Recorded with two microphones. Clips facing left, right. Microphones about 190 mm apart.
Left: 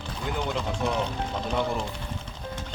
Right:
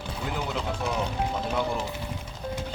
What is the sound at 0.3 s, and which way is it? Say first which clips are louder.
Speech: left 2 dB; 5° right (ahead or behind).